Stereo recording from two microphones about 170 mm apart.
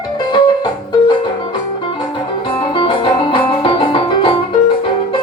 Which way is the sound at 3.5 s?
30° left (ahead or behind).